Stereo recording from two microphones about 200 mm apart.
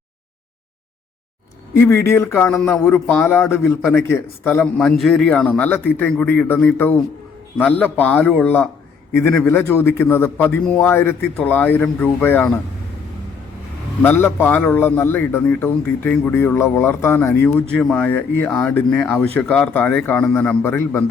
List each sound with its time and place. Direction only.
1.7 s a man's voice: 15° left (ahead or behind)
4.6 s a man's voice: centre (ahead or behind)
7.9 s a man's voice: 5° left (ahead or behind)
14.0 s a man's voice: 10° left (ahead or behind)